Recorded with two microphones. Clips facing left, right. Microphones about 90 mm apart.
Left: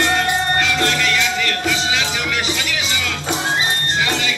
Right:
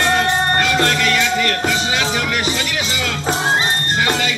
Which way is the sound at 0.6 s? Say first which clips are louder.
Right 2 dB; 45° right (ahead or behind).